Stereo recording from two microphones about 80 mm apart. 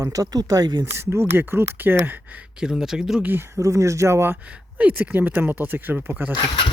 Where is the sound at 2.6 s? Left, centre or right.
Centre.